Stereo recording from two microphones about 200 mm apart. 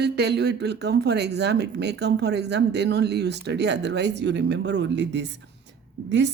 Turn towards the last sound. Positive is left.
turn(degrees=-60)  # may be behind; listen again after turning